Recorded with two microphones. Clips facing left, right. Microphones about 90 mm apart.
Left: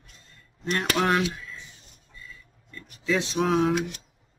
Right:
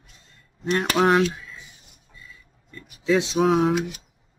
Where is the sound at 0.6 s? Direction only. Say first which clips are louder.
Right 4 dB; 5° right (ahead or behind).